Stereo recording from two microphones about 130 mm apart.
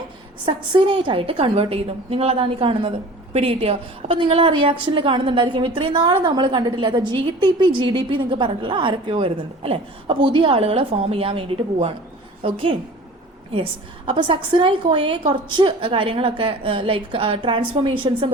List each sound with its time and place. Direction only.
0.4 s a woman's voice: 40° right (ahead or behind)